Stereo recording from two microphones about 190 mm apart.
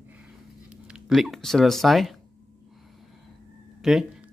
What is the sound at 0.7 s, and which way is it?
Speech, 5° right (ahead or behind).